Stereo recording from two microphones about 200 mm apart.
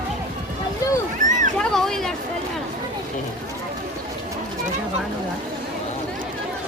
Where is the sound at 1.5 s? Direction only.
Centre (ahead or behind).